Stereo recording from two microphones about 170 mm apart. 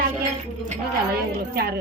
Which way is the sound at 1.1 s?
65° right (ahead or behind).